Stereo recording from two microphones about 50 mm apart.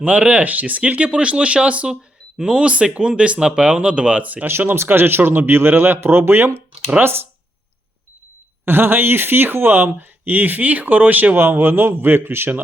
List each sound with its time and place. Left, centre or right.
0.0 s speech: right
4.4 s speech: right
8.6 s speech: right